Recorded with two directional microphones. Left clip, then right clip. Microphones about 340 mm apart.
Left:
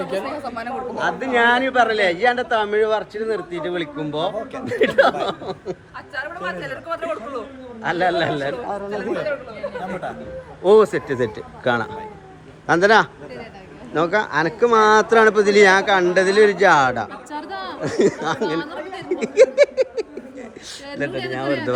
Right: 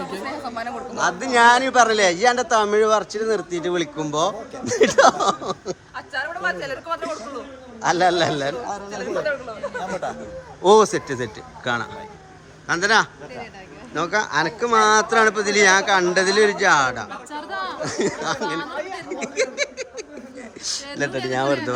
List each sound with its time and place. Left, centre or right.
0.1 s a woman's voice: centre; by 6.7 s right
6.8 s a man's voice: centre
8.6 s speech: centre
9.7 s a woman's voice: centre
19.2 s a sound: centre
20.7 s speech: centre